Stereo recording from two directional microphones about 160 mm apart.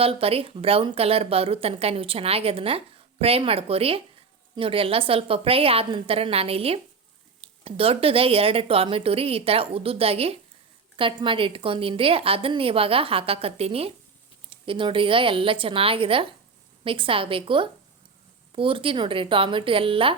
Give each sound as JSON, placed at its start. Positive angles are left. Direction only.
{"t": 0.0, "sound": "a woman's voice", "side_deg": -35}